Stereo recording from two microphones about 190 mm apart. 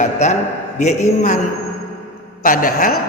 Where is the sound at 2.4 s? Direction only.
45° left (ahead or behind).